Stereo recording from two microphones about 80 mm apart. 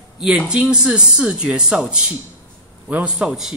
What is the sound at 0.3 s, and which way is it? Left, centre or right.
A woman's voice, centre.